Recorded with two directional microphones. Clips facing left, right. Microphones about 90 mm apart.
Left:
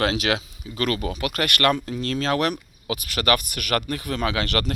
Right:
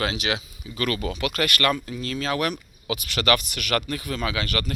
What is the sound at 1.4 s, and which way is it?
Speech, 55° left (ahead or behind).